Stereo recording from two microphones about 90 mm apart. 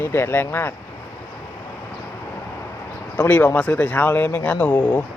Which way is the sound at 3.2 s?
20° left (ahead or behind).